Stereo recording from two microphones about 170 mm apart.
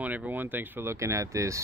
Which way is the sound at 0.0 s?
10° right (ahead or behind).